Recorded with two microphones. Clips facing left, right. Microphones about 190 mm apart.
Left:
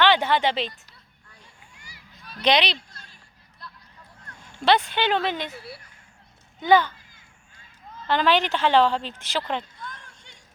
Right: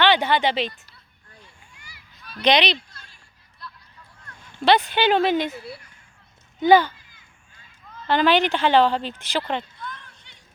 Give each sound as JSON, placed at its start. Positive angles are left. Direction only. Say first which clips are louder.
{"t": 0.0, "sound": "speech", "louder": "right 1 dB", "side_deg": 0}
{"t": 1.8, "sound": "a sound", "louder": "left 1 dB", "side_deg": 40}
{"t": 2.4, "sound": "speech", "louder": "right 2 dB", "side_deg": 5}
{"t": 4.6, "sound": "speech", "louder": "right 3 dB", "side_deg": -5}
{"t": 5.5, "sound": "speech", "louder": "right 5 dB", "side_deg": -25}
{"t": 6.6, "sound": "speech", "louder": "right 3 dB", "side_deg": -5}
{"t": 8.0, "sound": "speech", "louder": "right 3 dB", "side_deg": 0}
{"t": 9.8, "sound": "a sound", "louder": "right 3 dB", "side_deg": 45}